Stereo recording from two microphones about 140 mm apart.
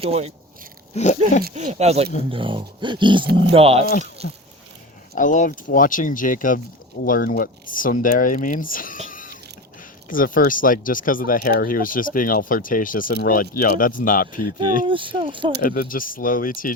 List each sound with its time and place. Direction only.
0.0 s speech: 45° right (ahead or behind)
0.9 s speech: 50° left (ahead or behind)
1.5 s speech: 55° right (ahead or behind)
2.3 s speech: 40° right (ahead or behind)
5.1 s speech: 65° left (ahead or behind)
7.0 s speech: 90° left
9.0 s a sound: 75° left (ahead or behind)
10.1 s speech: 80° left
14.8 s speech: 35° right (ahead or behind)
15.6 s speech: 90° left